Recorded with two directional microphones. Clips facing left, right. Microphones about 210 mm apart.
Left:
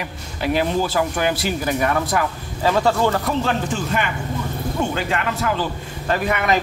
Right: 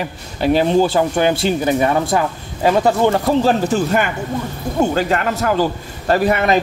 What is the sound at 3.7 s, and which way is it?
Speech, 45° right (ahead or behind).